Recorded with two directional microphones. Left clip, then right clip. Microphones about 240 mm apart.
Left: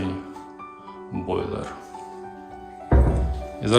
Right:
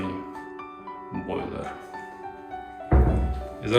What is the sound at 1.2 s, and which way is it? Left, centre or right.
Speech, centre.